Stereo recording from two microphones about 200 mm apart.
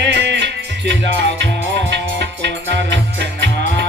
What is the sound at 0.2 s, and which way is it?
Music, 60° right (ahead or behind).